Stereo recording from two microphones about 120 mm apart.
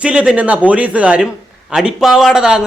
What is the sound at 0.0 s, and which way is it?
Speech, 10° right (ahead or behind).